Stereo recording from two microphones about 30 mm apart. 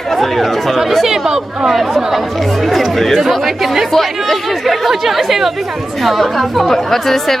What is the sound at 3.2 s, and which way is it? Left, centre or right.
Speech, centre.